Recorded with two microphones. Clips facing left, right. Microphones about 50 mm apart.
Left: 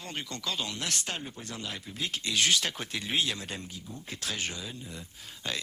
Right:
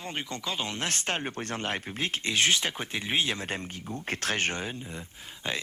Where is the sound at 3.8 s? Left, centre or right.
Right.